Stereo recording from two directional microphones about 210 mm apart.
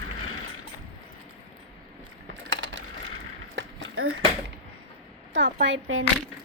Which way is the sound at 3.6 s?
70° right (ahead or behind).